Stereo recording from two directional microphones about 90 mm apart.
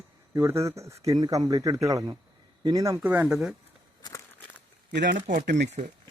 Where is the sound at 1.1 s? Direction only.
50° right (ahead or behind).